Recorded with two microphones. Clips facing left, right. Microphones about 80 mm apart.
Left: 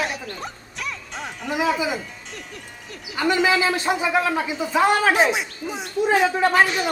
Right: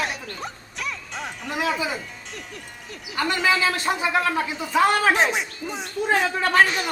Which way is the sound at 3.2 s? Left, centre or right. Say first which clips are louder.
Left 3 dB; centre.